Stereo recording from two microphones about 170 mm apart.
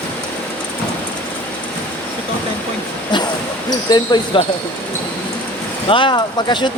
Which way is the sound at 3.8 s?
25° left (ahead or behind).